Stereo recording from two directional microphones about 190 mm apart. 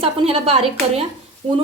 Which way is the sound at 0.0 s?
30° right (ahead or behind).